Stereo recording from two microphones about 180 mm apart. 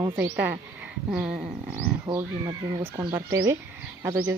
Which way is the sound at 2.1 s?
30° right (ahead or behind).